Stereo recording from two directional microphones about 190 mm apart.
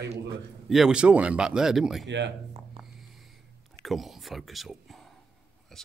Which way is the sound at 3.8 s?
Centre (ahead or behind).